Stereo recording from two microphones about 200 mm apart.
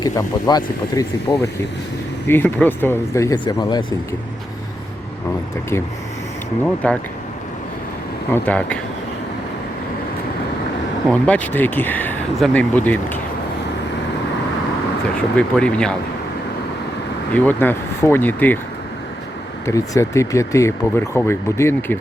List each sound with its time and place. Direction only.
0.0 s speech: 20° left (ahead or behind)
6.8 s speech: 5° left (ahead or behind)
8.3 s speech: 5° left (ahead or behind)
11.1 s speech: 5° left (ahead or behind)
15.4 s speech: 5° left (ahead or behind)
17.3 s speech: 10° left (ahead or behind)
19.6 s speech: 15° left (ahead or behind)